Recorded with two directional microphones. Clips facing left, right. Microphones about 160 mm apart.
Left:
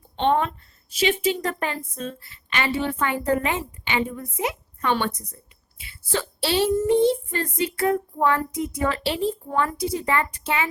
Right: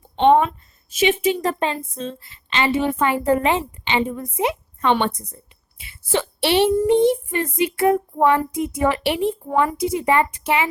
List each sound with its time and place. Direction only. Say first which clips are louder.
0.9 s a woman's voice: right 4 dB; 20° right (ahead or behind)